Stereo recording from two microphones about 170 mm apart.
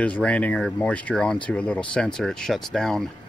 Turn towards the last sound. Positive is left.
turn(degrees=5)  # may be behind; listen again after turning